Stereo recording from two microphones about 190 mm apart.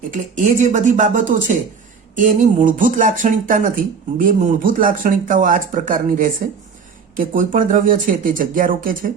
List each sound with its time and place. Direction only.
0.1 s speech: 40° right (ahead or behind)